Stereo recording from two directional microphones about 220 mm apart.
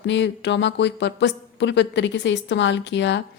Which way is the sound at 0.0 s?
55° left (ahead or behind).